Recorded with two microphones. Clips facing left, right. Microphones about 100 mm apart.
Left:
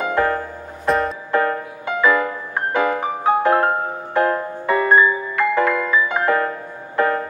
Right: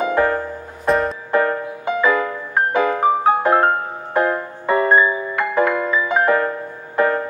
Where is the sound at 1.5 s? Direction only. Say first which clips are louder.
Right 2 dB; 20° right (ahead or behind).